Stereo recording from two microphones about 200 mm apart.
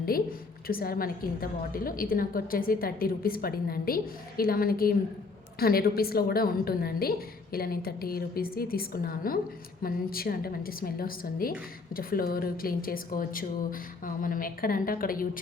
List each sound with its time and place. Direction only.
0.7 s a woman's voice: 50° left (ahead or behind)